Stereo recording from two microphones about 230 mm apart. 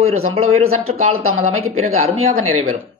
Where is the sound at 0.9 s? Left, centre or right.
Right.